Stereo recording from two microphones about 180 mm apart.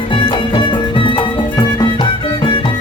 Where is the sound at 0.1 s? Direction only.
25° left (ahead or behind).